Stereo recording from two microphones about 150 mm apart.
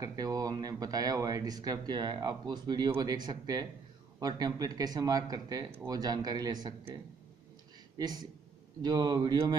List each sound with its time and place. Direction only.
0.0 s speech: 25° right (ahead or behind)
8.0 s speech: 25° right (ahead or behind)